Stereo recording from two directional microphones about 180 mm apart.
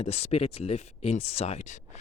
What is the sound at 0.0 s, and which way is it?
Speech, 35° left (ahead or behind).